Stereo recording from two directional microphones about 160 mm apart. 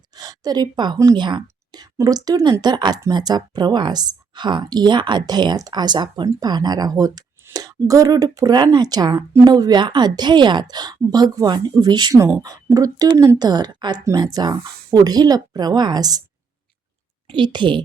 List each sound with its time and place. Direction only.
0.1 s a woman's voice: 25° right (ahead or behind)
17.2 s a woman's voice: 30° right (ahead or behind)